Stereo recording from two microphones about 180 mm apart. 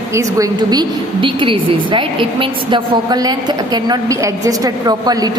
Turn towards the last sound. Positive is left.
turn(degrees=-20)  # may be behind; listen again after turning